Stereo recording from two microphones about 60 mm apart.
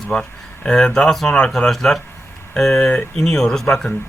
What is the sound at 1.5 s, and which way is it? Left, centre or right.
Speech, centre.